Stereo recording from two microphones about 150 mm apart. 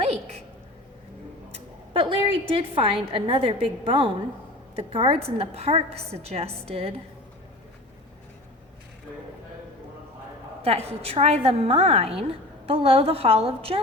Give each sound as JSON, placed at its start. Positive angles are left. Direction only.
{"t": 1.9, "sound": "a woman's voice", "side_deg": -35}
{"t": 10.6, "sound": "a woman's voice", "side_deg": -40}